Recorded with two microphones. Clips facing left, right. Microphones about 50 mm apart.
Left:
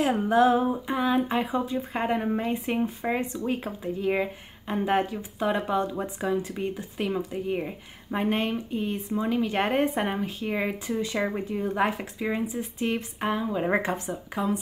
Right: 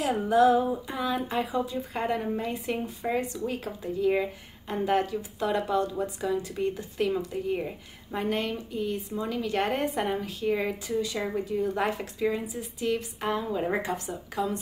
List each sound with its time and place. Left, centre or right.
0.3 s speech: left; by 7.7 s centre
8.1 s speech: left
13.3 s a woman's voice: centre
13.7 s speech: left